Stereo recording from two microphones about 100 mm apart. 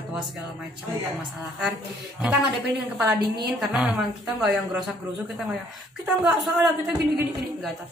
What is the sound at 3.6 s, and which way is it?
A woman's voice, 5° right (ahead or behind).